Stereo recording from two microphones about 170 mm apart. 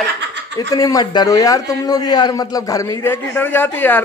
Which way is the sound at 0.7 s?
20° left (ahead or behind).